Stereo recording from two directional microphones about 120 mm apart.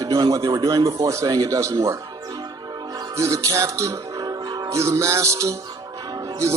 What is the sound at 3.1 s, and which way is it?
Music, 25° right (ahead or behind).